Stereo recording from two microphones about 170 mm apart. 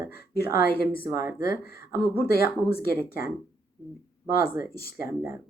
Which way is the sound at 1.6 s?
60° left (ahead or behind).